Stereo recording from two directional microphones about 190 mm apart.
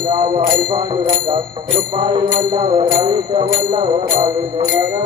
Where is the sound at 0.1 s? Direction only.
25° right (ahead or behind).